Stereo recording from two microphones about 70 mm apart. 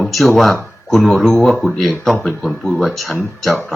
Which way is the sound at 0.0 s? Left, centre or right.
Centre.